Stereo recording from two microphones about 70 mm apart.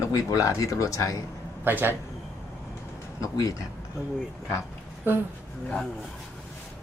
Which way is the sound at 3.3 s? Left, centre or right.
Left.